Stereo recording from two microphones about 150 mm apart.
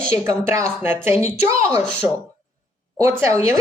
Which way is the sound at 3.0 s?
20° right (ahead or behind).